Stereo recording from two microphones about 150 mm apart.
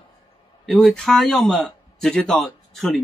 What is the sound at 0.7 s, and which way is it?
A man's voice, 5° left (ahead or behind).